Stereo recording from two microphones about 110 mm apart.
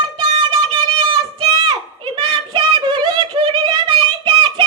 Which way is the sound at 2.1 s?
45° right (ahead or behind).